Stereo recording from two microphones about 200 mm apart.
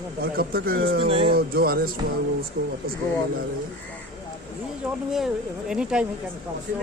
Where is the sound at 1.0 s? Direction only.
30° right (ahead or behind).